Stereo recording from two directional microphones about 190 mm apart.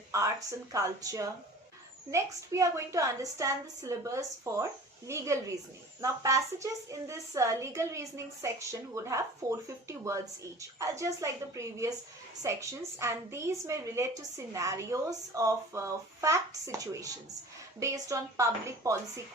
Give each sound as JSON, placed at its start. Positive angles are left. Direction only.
{"t": 0.1, "sound": "a woman's voice", "side_deg": -15}